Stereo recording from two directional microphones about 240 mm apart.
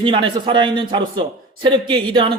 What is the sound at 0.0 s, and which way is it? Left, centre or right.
A man's voice, right.